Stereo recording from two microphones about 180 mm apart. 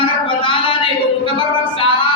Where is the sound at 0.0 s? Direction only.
30° left (ahead or behind).